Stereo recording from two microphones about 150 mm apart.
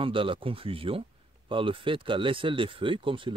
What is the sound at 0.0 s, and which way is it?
Speech, 35° right (ahead or behind).